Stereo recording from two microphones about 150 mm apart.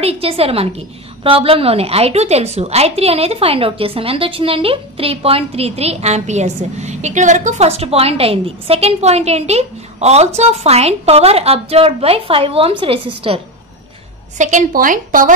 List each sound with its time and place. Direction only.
0.0 s a woman's voice: 40° right (ahead or behind)
14.4 s speech: 60° right (ahead or behind)